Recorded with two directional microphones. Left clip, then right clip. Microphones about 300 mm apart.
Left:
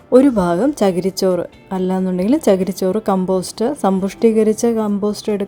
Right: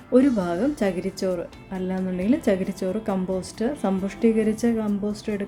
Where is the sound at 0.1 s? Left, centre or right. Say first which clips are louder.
Left 8 dB; left.